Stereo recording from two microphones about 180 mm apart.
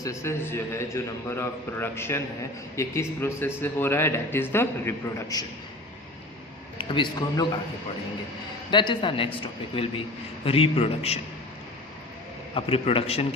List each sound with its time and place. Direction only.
0.0 s a man's voice: 15° left (ahead or behind)
6.7 s a man's voice: 25° left (ahead or behind)
8.7 s a man's voice: 25° left (ahead or behind)
12.5 s a man's voice: 30° left (ahead or behind)